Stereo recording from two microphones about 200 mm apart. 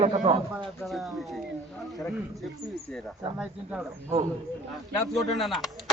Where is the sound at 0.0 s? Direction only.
30° right (ahead or behind).